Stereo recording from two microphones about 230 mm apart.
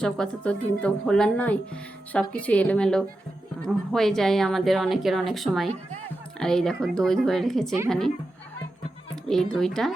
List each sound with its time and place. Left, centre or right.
0.0 s speech: centre
9.2 s speech: centre